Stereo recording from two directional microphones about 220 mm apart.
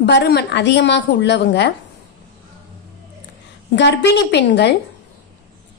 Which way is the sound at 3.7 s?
50° left (ahead or behind).